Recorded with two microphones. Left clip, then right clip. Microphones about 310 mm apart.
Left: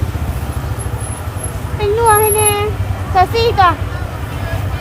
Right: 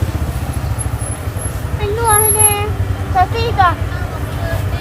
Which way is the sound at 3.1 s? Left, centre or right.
Left.